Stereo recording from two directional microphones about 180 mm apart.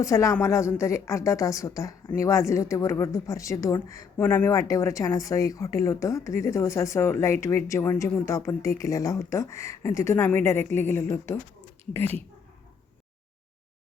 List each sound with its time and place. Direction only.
0.0 s a woman's voice: 15° left (ahead or behind)